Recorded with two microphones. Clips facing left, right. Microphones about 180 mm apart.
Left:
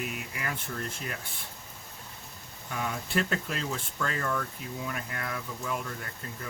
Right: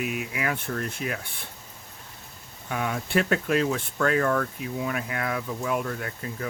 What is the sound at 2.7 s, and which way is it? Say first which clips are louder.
Speech: right 5 dB; 70° right (ahead or behind).